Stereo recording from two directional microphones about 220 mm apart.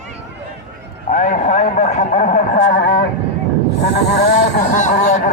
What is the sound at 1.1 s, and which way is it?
A man's voice, 35° left (ahead or behind).